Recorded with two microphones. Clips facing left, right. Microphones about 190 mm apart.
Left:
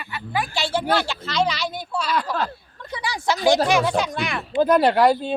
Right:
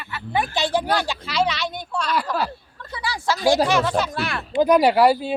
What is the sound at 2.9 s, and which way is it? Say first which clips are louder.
Speech: left 1 dB; 15° left (ahead or behind).